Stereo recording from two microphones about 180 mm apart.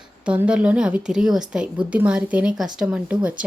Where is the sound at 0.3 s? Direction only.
5° right (ahead or behind).